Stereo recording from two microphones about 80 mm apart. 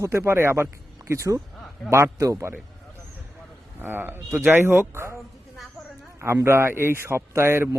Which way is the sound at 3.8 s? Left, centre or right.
Right.